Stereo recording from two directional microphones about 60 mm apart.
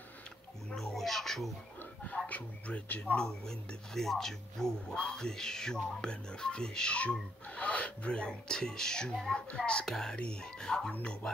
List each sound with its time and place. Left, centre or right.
0.7 s a sound: centre
2.1 s speech: left
3.3 s speech: centre